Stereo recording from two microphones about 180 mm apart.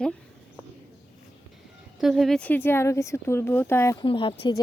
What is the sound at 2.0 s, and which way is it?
Speech, centre (ahead or behind).